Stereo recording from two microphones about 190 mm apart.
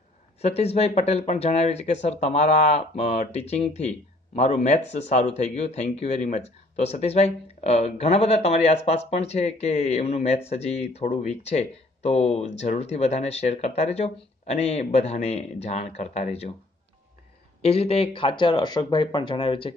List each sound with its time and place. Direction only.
0.4 s speech: 35° left (ahead or behind)
17.6 s speech: 30° left (ahead or behind)